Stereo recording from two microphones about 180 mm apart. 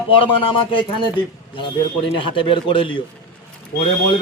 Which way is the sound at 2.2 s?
30° left (ahead or behind).